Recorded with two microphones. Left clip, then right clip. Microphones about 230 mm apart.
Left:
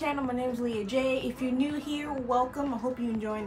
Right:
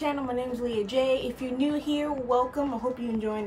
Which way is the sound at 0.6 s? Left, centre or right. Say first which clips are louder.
Right 5 dB; centre.